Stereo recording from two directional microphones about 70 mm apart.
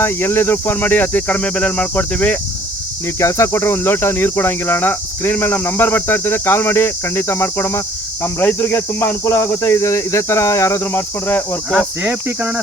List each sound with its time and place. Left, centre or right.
0.0 s speech: left
3.2 s speech: left
12.0 s speech: centre